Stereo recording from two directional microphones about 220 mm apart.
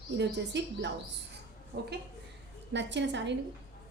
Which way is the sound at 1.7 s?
40° right (ahead or behind).